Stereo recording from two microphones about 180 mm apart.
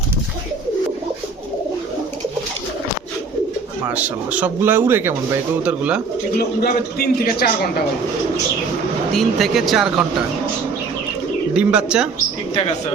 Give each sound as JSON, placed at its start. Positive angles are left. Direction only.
{"t": 3.8, "sound": "speech", "side_deg": -10}
{"t": 6.6, "sound": "a man's voice", "side_deg": 60}
{"t": 9.1, "sound": "speech", "side_deg": 0}
{"t": 11.5, "sound": "speech", "side_deg": -5}